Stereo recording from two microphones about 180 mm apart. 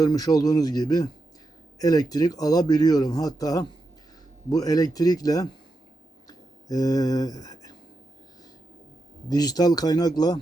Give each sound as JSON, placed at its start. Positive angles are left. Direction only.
{"t": 0.0, "sound": "speech", "side_deg": 20}
{"t": 6.2, "sound": "a sound", "side_deg": 20}
{"t": 9.3, "sound": "speech", "side_deg": 20}